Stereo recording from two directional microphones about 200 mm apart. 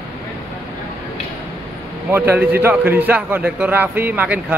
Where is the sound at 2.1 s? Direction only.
10° right (ahead or behind).